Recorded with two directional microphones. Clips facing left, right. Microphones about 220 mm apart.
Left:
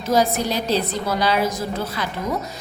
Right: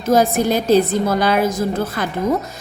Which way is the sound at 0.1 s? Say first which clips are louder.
Right 5 dB; 50° right (ahead or behind).